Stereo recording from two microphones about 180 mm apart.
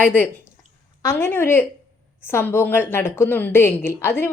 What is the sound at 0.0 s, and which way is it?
A woman's voice, 10° left (ahead or behind).